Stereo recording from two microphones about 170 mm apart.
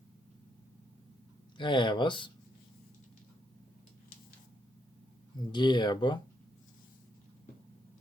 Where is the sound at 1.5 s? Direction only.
25° left (ahead or behind).